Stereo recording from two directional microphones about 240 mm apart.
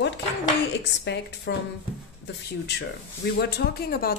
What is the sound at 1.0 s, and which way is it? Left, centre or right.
Speech, left.